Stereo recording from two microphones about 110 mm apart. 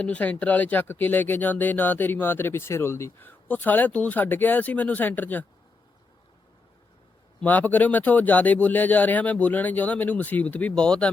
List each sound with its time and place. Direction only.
0.0 s speech: 10° left (ahead or behind)
7.4 s speech: 15° left (ahead or behind)